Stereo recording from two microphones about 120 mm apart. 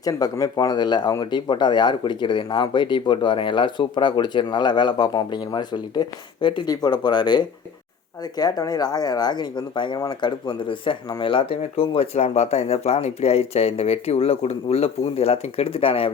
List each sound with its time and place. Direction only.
0.0 s speech: 30° left (ahead or behind); by 16.1 s 50° left (ahead or behind)